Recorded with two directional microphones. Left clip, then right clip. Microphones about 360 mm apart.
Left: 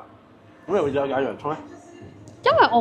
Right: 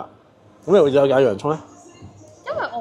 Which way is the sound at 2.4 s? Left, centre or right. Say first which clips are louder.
Left 9 dB; left.